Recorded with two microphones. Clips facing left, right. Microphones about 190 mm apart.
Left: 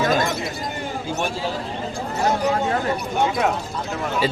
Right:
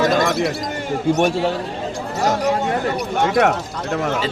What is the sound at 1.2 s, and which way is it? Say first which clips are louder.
Speech: right 5 dB; 65° right (ahead or behind).